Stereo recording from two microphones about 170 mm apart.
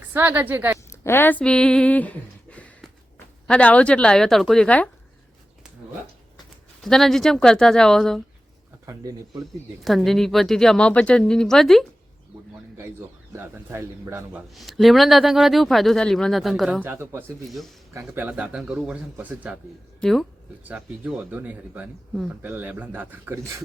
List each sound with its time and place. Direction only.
0.0 s speech: 10° right (ahead or behind)
0.9 s a woman's voice: 15° left (ahead or behind)
6.8 s speech: centre (ahead or behind)
8.9 s speech: 20° right (ahead or behind)
9.8 s speech: centre (ahead or behind)
13.3 s a man's voice: 15° right (ahead or behind)
14.5 s speech: centre (ahead or behind)
16.8 s a man's voice: 15° right (ahead or behind)
20.0 s speech: centre (ahead or behind)
20.7 s a man's voice: 10° right (ahead or behind)